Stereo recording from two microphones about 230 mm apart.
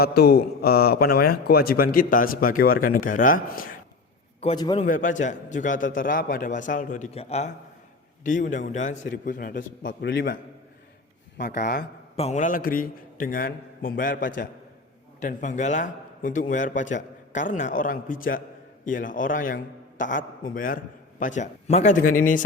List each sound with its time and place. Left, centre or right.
0.0 s a man's voice: left
4.4 s a man's voice: left
4.9 s a man's voice: left
12.1 s a man's voice: left